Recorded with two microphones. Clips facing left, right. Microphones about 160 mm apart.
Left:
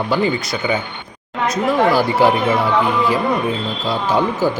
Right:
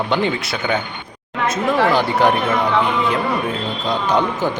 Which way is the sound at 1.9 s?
5° left (ahead or behind).